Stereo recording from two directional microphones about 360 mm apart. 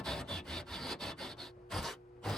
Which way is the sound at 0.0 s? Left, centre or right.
Centre.